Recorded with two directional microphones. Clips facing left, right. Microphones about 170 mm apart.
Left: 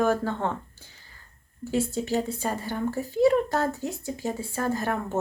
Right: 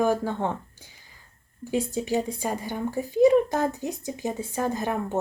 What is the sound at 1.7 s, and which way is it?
Speech, 15° right (ahead or behind).